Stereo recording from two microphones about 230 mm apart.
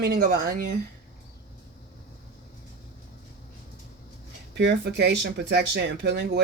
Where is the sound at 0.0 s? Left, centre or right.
Right.